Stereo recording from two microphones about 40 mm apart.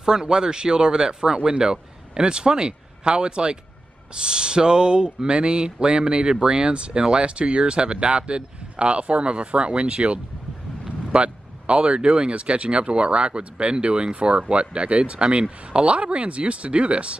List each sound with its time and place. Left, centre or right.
0.0 s speech: centre